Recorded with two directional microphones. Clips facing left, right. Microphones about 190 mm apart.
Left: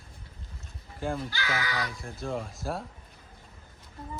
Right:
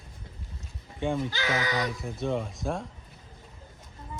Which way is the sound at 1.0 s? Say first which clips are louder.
Right 4 dB; centre (ahead or behind).